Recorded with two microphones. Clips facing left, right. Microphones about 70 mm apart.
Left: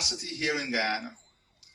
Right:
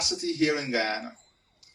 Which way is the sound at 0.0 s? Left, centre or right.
Right.